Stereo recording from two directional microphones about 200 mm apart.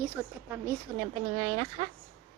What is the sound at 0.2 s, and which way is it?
Speech, centre (ahead or behind).